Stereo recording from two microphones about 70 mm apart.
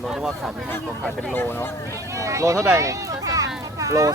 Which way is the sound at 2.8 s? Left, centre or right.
Right.